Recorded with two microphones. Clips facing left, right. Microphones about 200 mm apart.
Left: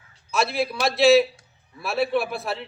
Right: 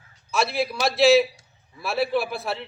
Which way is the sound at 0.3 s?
Centre (ahead or behind).